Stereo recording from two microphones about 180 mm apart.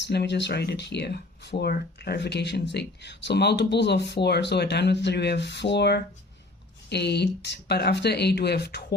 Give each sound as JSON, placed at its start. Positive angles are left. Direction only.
{"t": 0.0, "sound": "speech", "side_deg": 70}